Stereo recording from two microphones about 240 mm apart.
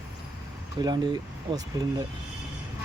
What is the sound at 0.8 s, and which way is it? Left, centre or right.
Speech, centre.